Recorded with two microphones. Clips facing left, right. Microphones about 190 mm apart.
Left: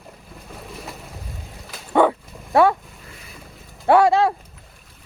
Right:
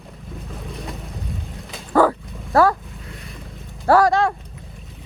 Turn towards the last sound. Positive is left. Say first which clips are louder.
# even
turn(degrees=25)  # may be behind; listen again after turning